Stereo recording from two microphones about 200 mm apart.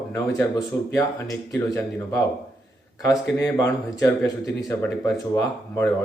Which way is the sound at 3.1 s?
15° left (ahead or behind).